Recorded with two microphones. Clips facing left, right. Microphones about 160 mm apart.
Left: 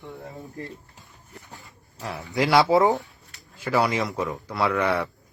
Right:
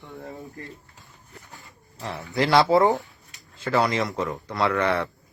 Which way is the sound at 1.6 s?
Centre (ahead or behind).